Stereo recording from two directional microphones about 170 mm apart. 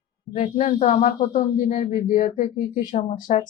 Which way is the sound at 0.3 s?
40° left (ahead or behind).